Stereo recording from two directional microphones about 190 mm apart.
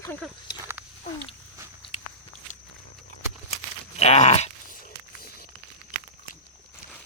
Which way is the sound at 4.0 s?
35° left (ahead or behind).